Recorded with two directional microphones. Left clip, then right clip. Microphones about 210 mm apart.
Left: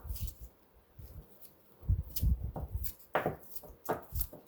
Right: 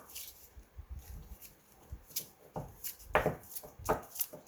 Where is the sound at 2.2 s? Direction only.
30° left (ahead or behind).